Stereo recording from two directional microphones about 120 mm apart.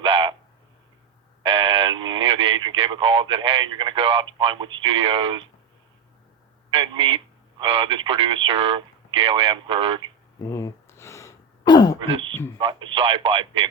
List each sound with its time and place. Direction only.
0.0 s a sound: 45° right (ahead or behind)
1.5 s radio: 50° right (ahead or behind)
6.7 s speech: 45° right (ahead or behind)
10.4 s a sound: 25° left (ahead or behind)
11.6 s throat clearing: 35° left (ahead or behind)
11.9 s throat clearing: 45° right (ahead or behind)
12.5 s speech: 45° right (ahead or behind)